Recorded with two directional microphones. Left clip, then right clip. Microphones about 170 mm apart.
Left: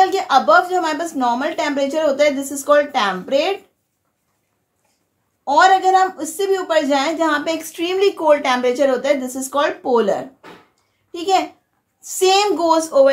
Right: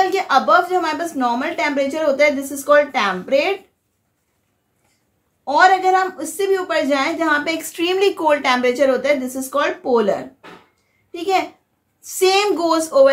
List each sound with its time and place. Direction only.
0.0 s a woman's voice: 20° right (ahead or behind)
5.4 s a woman's voice: 20° right (ahead or behind)